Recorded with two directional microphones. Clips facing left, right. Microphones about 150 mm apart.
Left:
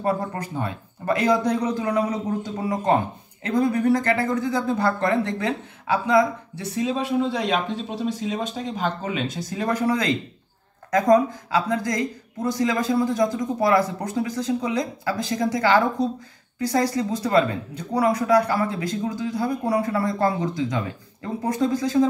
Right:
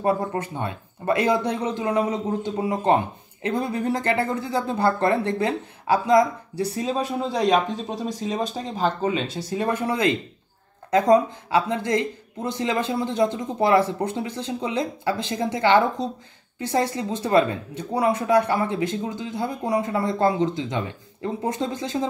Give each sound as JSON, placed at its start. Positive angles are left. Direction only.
{"t": 0.0, "sound": "speech", "side_deg": -25}